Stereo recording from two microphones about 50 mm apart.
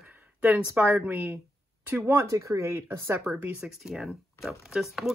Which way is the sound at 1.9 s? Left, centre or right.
Right.